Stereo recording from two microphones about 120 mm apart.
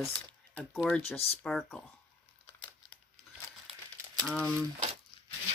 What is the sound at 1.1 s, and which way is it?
Speech, 55° left (ahead or behind).